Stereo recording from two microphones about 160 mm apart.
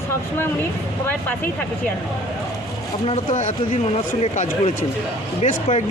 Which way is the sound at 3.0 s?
45° left (ahead or behind).